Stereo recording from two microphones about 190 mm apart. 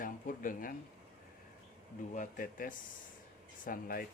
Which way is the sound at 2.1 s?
45° left (ahead or behind).